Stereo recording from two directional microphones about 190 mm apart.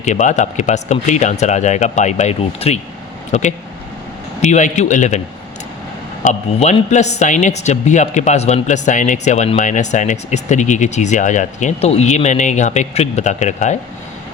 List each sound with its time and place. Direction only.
0.0 s speech: 40° left (ahead or behind)
4.4 s speech: 35° left (ahead or behind)
6.2 s speech: 40° left (ahead or behind)